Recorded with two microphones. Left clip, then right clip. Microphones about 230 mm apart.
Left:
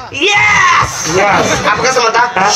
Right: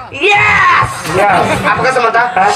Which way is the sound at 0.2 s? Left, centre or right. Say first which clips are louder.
Even; centre.